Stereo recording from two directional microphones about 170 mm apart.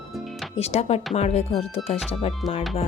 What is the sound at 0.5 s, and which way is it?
Speech, 40° left (ahead or behind).